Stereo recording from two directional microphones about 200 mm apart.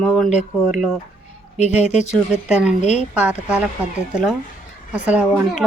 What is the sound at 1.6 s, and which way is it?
Speech, 35° left (ahead or behind).